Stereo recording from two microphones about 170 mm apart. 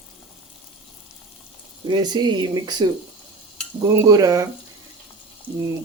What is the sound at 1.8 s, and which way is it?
Speech, 25° right (ahead or behind).